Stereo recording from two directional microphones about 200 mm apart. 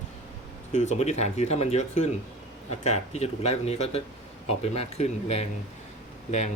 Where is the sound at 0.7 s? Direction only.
35° left (ahead or behind).